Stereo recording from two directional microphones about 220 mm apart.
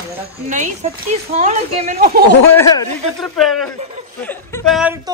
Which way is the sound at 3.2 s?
Centre (ahead or behind).